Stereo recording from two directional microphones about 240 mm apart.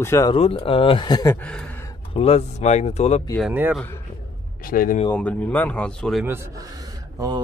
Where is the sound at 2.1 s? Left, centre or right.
Left.